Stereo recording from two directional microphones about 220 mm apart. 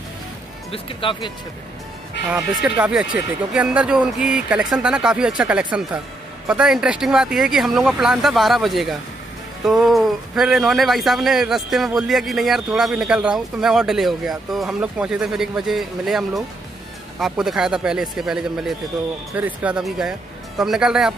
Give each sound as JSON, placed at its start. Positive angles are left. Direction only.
{"t": 0.7, "sound": "speech", "side_deg": 25}
{"t": 2.2, "sound": "a man's voice", "side_deg": -5}